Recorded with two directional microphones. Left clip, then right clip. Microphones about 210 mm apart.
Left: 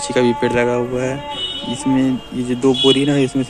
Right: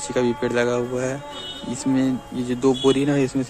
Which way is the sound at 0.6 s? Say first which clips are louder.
Left 2 dB; 15° right (ahead or behind).